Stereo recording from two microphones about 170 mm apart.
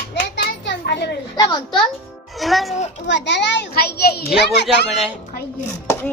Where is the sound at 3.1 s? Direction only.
90° left; by 4.2 s 70° left (ahead or behind).